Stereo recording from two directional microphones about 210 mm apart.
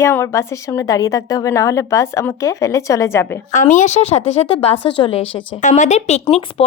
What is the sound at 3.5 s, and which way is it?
Speech, 35° left (ahead or behind).